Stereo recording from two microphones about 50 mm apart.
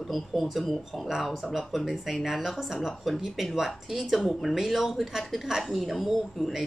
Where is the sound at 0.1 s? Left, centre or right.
Centre.